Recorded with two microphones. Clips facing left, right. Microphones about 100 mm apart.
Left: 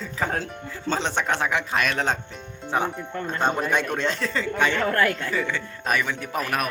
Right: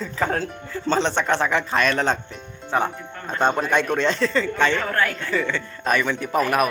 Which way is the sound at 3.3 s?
5° left (ahead or behind).